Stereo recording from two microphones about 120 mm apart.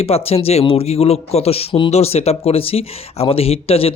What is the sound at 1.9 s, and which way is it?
Speech, 60° left (ahead or behind).